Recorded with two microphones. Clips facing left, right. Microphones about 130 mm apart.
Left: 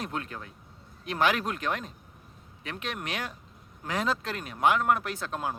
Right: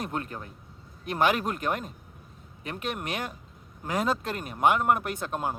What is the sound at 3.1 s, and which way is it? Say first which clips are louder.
Speech: right 2 dB; 45° right (ahead or behind).